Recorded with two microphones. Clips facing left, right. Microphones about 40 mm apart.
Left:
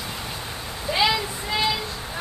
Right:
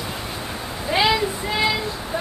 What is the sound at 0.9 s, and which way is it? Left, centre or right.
Speech, right.